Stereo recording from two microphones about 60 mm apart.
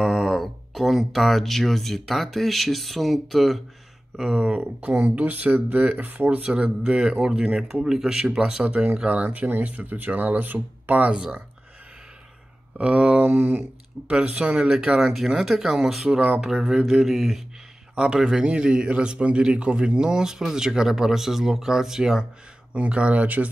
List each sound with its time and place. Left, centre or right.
0.0 s speech: centre
4.6 s speech: right
6.4 s a man's voice: centre
8.6 s speech: right
11.1 s a man's voice: centre
12.7 s a man's voice: centre
13.2 s a sound: right
14.2 s a man's voice: right; by 17.4 s centre
17.9 s a man's voice: centre
22.8 s speech: centre